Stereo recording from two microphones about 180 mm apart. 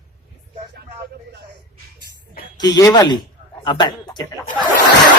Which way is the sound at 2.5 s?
25° left (ahead or behind).